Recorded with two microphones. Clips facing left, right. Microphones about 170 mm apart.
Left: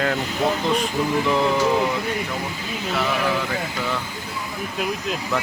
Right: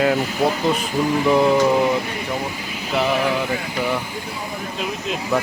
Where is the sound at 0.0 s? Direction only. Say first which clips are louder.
Right 5 dB; 15° right (ahead or behind).